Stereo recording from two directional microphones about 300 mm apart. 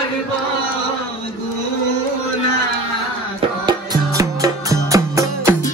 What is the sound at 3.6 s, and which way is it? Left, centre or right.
Music, centre.